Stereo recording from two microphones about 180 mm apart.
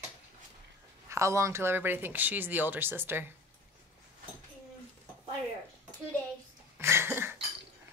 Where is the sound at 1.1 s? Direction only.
15° right (ahead or behind).